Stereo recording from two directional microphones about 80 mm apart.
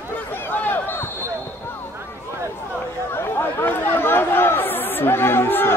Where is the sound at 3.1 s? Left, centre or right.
Left.